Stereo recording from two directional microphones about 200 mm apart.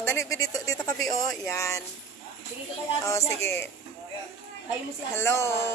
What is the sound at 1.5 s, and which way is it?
Speech, 15° left (ahead or behind).